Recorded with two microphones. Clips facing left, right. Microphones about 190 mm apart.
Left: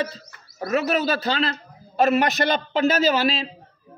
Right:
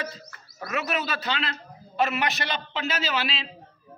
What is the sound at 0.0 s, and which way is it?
A man's voice, 30° left (ahead or behind).